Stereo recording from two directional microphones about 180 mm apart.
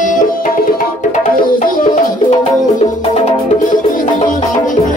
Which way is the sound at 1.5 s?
45° left (ahead or behind).